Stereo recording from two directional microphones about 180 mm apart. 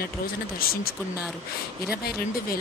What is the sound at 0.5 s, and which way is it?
Speech, 55° left (ahead or behind).